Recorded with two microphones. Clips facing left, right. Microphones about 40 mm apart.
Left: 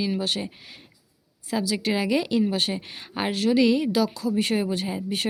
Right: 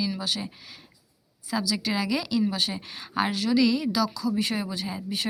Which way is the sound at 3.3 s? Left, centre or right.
Left.